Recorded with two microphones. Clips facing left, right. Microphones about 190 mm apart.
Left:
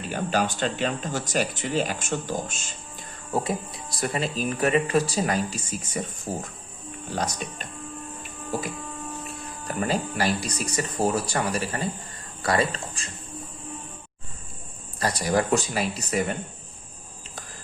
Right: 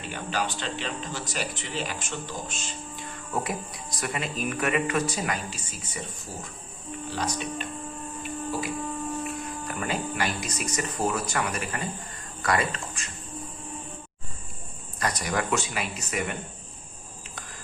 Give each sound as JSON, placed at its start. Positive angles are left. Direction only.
{"t": 0.0, "sound": "speech", "side_deg": 45}
{"t": 3.3, "sound": "speech", "side_deg": 30}
{"t": 9.2, "sound": "speech", "side_deg": 35}
{"t": 14.9, "sound": "speech", "side_deg": 30}